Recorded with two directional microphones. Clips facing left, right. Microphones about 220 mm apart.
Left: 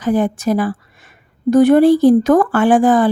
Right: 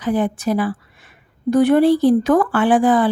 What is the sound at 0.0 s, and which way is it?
Speech, 45° left (ahead or behind).